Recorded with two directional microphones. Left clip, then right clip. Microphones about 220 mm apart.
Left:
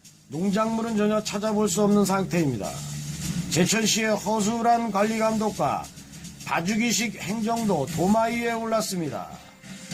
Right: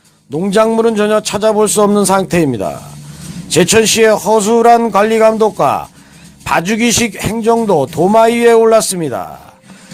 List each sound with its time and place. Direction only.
0.4 s a man's voice: 40° right (ahead or behind)